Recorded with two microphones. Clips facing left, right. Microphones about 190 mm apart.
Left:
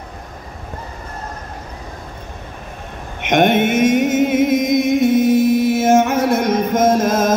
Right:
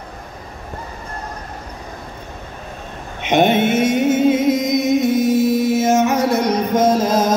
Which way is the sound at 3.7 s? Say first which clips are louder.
Left 1 dB; 10° left (ahead or behind).